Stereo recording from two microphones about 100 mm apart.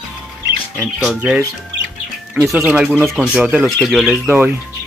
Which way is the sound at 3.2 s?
10° right (ahead or behind).